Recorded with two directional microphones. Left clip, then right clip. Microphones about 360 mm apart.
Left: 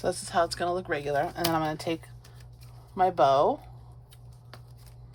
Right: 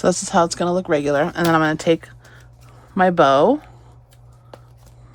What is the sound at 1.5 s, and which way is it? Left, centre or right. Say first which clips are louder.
Speech: right 12 dB; right.